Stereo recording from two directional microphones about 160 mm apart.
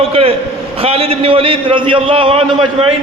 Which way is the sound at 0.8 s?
35° right (ahead or behind).